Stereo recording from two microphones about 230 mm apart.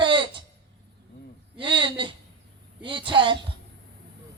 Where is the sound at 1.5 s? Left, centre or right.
Right.